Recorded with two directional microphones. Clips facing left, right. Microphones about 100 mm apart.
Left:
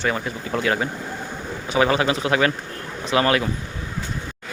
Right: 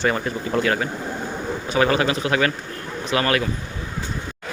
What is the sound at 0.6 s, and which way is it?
Speech, 20° left (ahead or behind).